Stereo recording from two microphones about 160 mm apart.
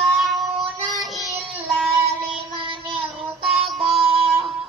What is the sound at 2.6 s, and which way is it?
Child singing, 30° right (ahead or behind).